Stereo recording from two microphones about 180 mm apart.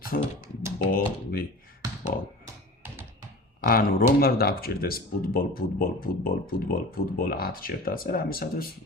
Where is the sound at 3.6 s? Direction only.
55° left (ahead or behind).